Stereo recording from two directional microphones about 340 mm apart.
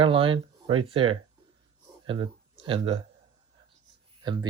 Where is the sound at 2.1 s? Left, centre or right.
Centre.